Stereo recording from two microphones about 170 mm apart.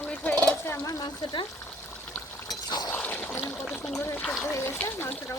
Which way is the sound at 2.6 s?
20° left (ahead or behind).